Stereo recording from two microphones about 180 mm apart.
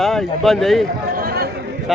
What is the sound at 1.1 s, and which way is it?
Chatter, 55° right (ahead or behind).